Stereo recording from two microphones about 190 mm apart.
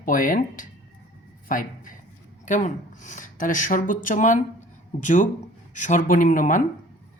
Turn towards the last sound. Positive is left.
turn(degrees=45)  # may be behind; listen again after turning